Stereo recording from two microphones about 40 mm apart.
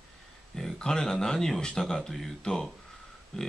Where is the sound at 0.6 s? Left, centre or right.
Centre.